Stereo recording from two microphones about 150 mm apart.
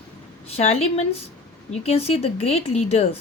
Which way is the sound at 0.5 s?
45° left (ahead or behind).